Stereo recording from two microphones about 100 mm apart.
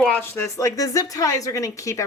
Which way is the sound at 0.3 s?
35° left (ahead or behind).